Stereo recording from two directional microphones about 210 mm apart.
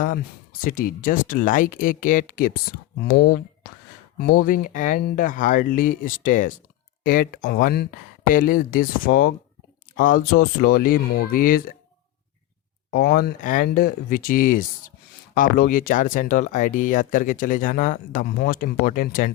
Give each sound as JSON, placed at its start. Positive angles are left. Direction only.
{"t": 0.0, "sound": "speech", "side_deg": 40}
{"t": 12.9, "sound": "speech", "side_deg": 45}